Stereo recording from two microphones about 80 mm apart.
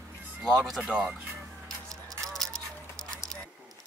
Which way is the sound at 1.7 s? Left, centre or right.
Centre.